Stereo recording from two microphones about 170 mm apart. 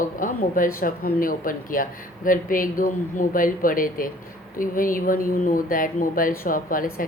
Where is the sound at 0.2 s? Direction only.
50° left (ahead or behind).